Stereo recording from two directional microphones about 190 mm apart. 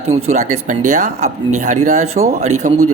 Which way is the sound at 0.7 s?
40° right (ahead or behind).